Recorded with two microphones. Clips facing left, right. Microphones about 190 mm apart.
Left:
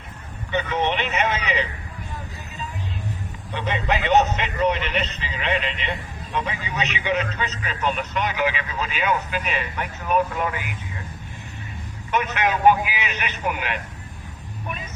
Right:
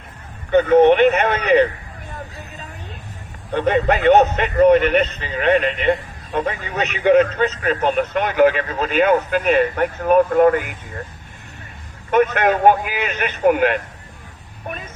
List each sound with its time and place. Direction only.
0.5 s a man's voice: 50° right (ahead or behind)
3.5 s a man's voice: 50° right (ahead or behind)
12.1 s a man's voice: 50° right (ahead or behind)